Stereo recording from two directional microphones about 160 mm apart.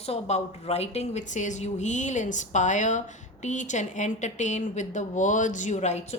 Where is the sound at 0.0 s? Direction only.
40° left (ahead or behind).